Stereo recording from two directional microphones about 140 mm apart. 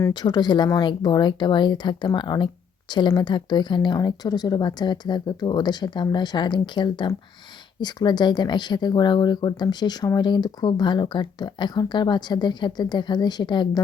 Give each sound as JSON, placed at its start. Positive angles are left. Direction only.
{"t": 0.1, "sound": "speech", "side_deg": 30}